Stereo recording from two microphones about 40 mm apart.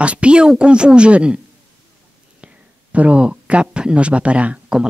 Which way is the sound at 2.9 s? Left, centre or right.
Right.